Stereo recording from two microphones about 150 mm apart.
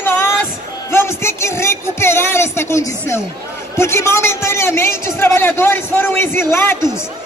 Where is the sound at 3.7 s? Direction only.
15° left (ahead or behind).